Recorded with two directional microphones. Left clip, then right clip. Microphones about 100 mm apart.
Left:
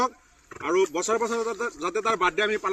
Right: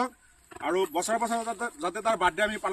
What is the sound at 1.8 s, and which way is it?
Speech, 35° right (ahead or behind).